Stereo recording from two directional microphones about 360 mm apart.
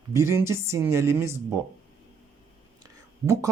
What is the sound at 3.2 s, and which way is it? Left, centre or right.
Speech, centre.